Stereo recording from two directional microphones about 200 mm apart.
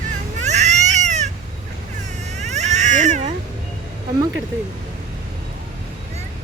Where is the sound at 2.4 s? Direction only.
35° right (ahead or behind).